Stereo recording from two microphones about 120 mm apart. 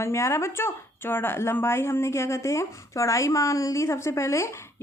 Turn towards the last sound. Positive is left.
turn(degrees=20)  # may be behind; listen again after turning